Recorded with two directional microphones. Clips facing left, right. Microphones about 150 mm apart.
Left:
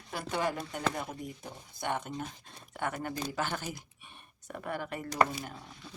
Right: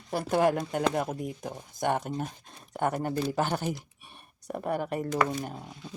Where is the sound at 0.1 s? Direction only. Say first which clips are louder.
Right 8 dB; 40° right (ahead or behind).